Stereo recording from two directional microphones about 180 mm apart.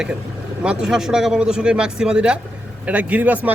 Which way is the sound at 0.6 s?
5° right (ahead or behind).